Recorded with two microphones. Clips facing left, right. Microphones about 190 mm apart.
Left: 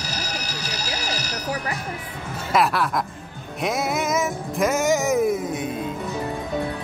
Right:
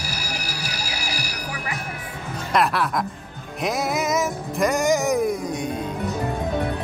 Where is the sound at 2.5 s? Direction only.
Centre (ahead or behind).